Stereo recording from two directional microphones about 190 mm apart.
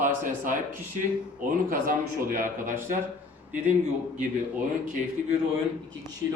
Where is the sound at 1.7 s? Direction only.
45° right (ahead or behind).